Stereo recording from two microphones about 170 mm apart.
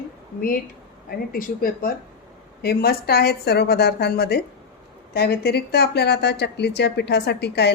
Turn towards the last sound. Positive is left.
turn(degrees=75)  # may be behind; listen again after turning